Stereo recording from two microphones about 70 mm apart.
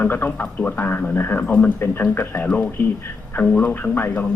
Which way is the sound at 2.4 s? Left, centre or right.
Left.